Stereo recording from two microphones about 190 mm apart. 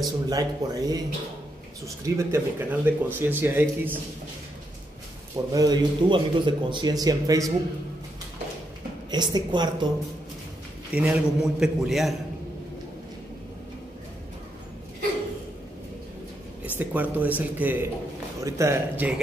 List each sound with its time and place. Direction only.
0.0 s a man's voice: 20° right (ahead or behind)
2.0 s speech: 15° right (ahead or behind)
5.3 s a man's voice: 20° right (ahead or behind)
9.1 s a man's voice: 25° right (ahead or behind)
11.0 s a man's voice: 5° right (ahead or behind)
16.7 s speech: 10° right (ahead or behind)